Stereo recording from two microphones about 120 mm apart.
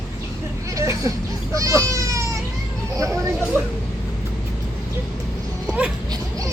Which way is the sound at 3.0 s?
25° right (ahead or behind).